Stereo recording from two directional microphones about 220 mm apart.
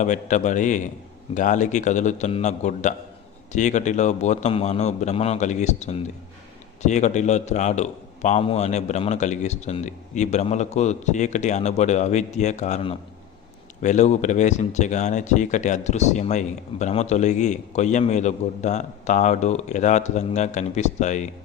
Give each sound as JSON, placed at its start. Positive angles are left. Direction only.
{"t": 0.0, "sound": "speech", "side_deg": 35}